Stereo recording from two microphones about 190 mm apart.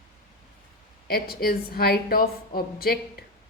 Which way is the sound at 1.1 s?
55° left (ahead or behind).